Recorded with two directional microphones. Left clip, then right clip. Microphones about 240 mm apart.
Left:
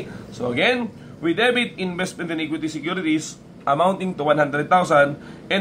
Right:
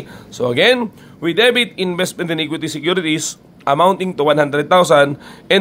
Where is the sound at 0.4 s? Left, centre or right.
Right.